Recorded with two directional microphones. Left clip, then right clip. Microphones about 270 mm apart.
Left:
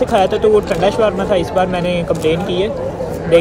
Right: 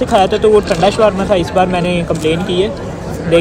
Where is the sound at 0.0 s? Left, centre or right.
Centre.